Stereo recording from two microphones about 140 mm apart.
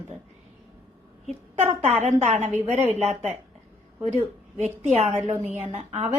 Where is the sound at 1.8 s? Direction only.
55° right (ahead or behind).